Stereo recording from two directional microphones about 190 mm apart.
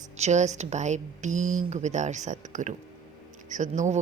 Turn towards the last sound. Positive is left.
turn(degrees=-40)  # may be behind; listen again after turning